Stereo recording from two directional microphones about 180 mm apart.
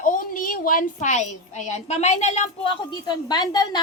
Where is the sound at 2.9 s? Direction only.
25° left (ahead or behind).